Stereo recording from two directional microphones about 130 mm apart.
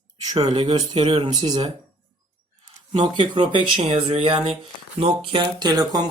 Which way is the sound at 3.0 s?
35° right (ahead or behind).